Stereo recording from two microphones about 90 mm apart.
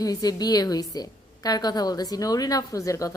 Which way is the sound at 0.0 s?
45° left (ahead or behind).